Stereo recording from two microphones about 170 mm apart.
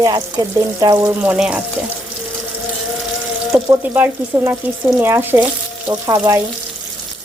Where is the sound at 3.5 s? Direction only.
15° right (ahead or behind).